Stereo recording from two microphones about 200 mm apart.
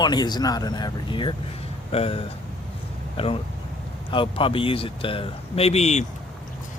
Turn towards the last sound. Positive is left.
turn(degrees=35)  # may be behind; listen again after turning